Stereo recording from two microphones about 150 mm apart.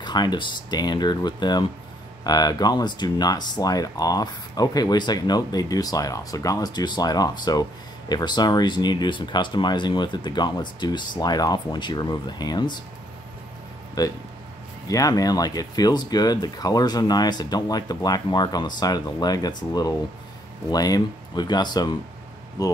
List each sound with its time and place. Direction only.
0.0 s speech: 30° left (ahead or behind)
14.0 s speech: 25° left (ahead or behind)